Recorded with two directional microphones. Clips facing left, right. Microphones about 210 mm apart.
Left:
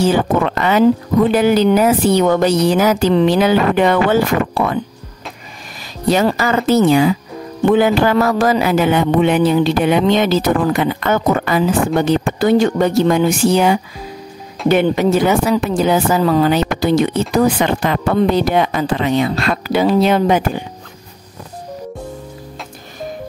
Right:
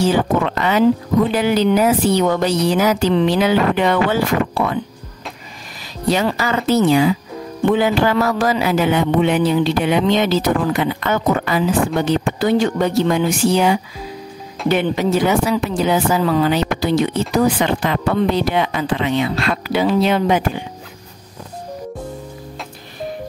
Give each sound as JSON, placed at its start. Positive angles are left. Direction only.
{"t": 0.0, "sound": "speech", "side_deg": 50}
{"t": 6.0, "sound": "speech", "side_deg": 45}